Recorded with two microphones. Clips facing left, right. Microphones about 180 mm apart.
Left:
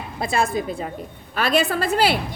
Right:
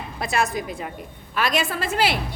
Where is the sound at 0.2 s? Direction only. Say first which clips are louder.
Left 2 dB; 30° left (ahead or behind).